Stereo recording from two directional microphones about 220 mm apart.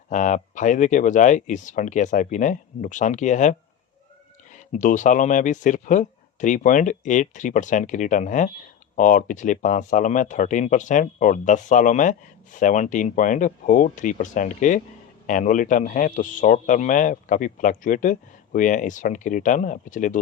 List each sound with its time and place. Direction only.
0.1 s speech: 35° left (ahead or behind)
4.5 s speech: 35° left (ahead or behind)